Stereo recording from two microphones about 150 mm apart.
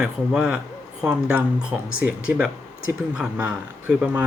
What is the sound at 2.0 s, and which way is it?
Speech, 10° right (ahead or behind).